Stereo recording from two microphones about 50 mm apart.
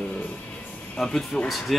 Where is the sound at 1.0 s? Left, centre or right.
Centre.